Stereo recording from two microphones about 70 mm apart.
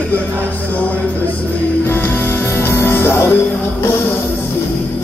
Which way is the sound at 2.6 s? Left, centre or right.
Left.